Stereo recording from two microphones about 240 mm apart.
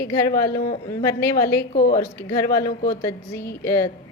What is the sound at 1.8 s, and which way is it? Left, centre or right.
A woman's voice, left.